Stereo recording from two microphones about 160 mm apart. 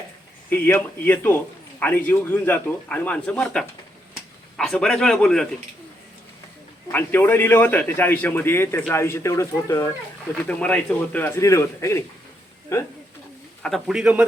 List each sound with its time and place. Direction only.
0.5 s speech: 10° left (ahead or behind)
6.9 s speech: 10° left (ahead or behind)
13.6 s speech: centre (ahead or behind)